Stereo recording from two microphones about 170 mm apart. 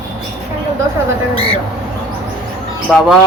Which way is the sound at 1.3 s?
30° right (ahead or behind).